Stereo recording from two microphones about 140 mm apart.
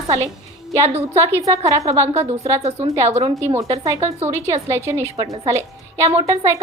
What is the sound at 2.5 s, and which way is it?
A woman's voice, 50° right (ahead or behind).